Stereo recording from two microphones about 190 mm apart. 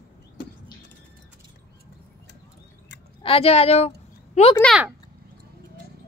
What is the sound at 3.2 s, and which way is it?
A woman's voice, 30° left (ahead or behind).